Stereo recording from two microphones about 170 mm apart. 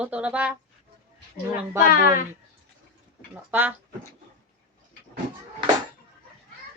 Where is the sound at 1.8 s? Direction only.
55° left (ahead or behind).